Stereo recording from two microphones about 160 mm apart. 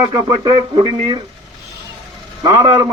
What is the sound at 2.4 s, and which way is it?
Speech, 25° right (ahead or behind).